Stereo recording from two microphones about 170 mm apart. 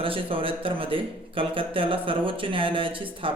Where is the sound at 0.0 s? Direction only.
30° right (ahead or behind).